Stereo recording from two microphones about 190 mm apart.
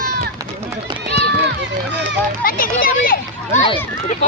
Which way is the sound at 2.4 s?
50° left (ahead or behind).